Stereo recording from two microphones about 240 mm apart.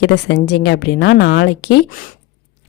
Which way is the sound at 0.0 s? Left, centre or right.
Left.